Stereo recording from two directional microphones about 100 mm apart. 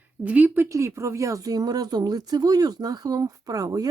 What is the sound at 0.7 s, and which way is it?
Speech, 30° right (ahead or behind).